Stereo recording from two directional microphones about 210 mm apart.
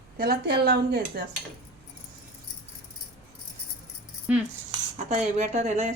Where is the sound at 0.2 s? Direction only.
50° right (ahead or behind).